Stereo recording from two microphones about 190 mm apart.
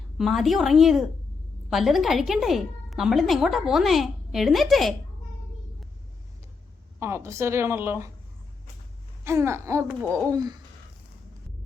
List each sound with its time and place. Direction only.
0.2 s a woman's voice: centre (ahead or behind)
7.0 s a woman's voice: 15° right (ahead or behind)
9.2 s a woman's voice: 15° right (ahead or behind)